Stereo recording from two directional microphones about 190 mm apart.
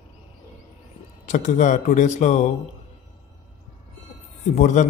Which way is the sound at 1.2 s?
40° left (ahead or behind).